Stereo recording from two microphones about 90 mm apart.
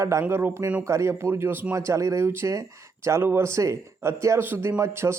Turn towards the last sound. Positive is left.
turn(degrees=-30)  # may be behind; listen again after turning